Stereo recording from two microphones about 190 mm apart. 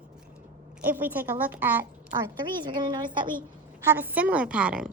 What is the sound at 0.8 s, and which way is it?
A woman's voice, 10° right (ahead or behind).